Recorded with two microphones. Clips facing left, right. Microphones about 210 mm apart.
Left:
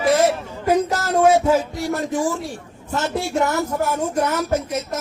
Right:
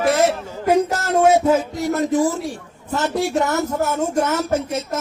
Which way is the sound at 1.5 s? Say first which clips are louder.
Right 1 dB; 20° right (ahead or behind).